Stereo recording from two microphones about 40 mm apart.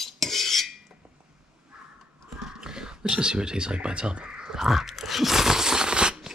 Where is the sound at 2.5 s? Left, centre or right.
Centre.